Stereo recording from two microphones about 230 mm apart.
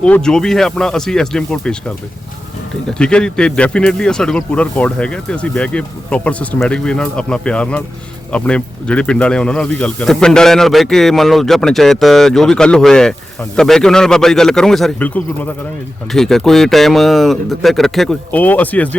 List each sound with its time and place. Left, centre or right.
0.0 s speech: centre
2.8 s speech: centre